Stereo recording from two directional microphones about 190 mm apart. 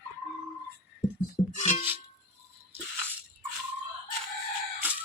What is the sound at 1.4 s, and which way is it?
Music, 35° left (ahead or behind).